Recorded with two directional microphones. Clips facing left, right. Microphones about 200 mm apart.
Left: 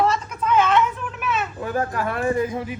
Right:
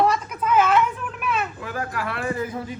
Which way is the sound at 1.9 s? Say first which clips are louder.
Left 4 dB; 40° left (ahead or behind).